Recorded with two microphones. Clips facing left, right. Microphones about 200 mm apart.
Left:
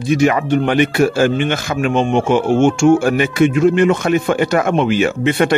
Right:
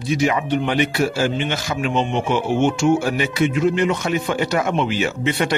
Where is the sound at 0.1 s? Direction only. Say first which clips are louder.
Left 5 dB; 55° left (ahead or behind).